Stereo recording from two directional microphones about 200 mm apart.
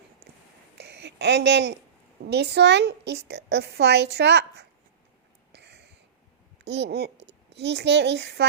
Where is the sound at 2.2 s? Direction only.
55° right (ahead or behind).